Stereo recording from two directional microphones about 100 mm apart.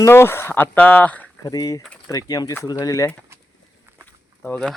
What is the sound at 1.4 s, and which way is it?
Speech, 35° left (ahead or behind).